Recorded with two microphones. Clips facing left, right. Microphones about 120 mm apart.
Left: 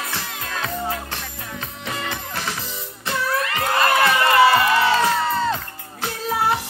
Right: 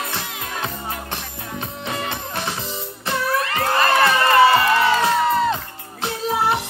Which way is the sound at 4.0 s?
30° right (ahead or behind).